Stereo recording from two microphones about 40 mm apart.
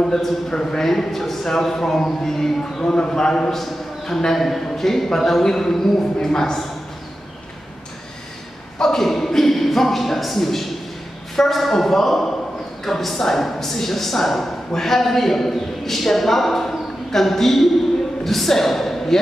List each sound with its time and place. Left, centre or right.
0.6 s a man's voice: centre
8.7 s a sound: centre
11.3 s speech: centre